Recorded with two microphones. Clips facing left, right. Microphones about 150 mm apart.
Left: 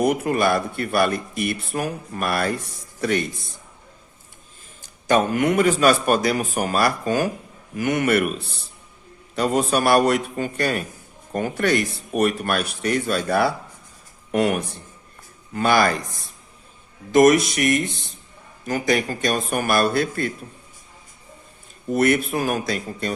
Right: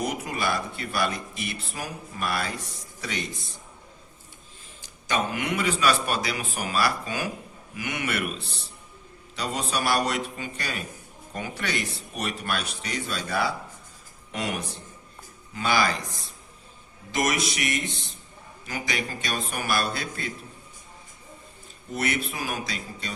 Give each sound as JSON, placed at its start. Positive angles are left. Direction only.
{"t": 0.0, "sound": "a man's voice", "side_deg": 55}
{"t": 4.8, "sound": "a man's voice", "side_deg": 50}
{"t": 17.1, "sound": "a man's voice", "side_deg": 50}
{"t": 21.9, "sound": "a man's voice", "side_deg": 50}